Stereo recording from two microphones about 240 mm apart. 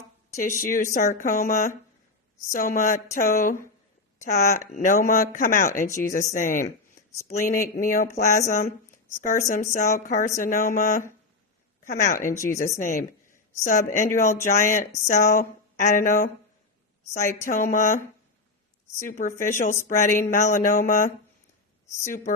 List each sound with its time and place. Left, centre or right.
0.4 s speech: left
12.2 s speech: centre
12.5 s speech: left
19.0 s speech: left
19.7 s speech: centre
20.1 s speech: left